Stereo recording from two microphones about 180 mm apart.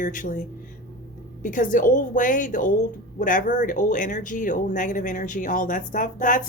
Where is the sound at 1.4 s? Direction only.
45° left (ahead or behind).